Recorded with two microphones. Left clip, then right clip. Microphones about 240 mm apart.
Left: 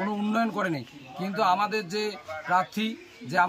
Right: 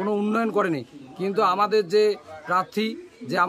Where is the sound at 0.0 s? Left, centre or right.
Centre.